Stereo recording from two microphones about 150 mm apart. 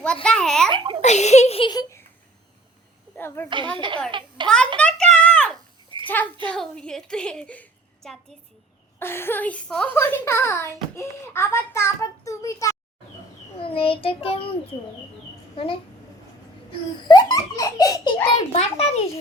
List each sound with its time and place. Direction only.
0.0 s a woman's voice: 5° left (ahead or behind)
0.7 s a child's voice: 35° right (ahead or behind)
1.0 s a child's voice: 50° left (ahead or behind)
1.7 s a sound: 20° left (ahead or behind)
3.2 s a child's voice: 15° left (ahead or behind)
3.8 s speech: 35° right (ahead or behind)
4.4 s a woman's voice: 5° left (ahead or behind)
5.2 s a sound: 5° left (ahead or behind)
6.4 s a woman's voice: 5° left (ahead or behind)
13.6 s a child's voice: 40° left (ahead or behind)
15.5 s a child's voice: 35° left (ahead or behind)
17.1 s baby laughter: 25° left (ahead or behind)
18.3 s a child's voice: 40° left (ahead or behind)